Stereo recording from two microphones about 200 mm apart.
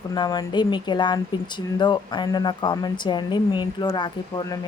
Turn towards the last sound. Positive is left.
turn(degrees=20)  # may be behind; listen again after turning